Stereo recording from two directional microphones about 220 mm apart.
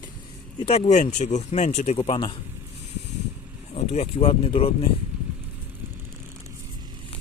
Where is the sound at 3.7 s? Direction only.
30° left (ahead or behind).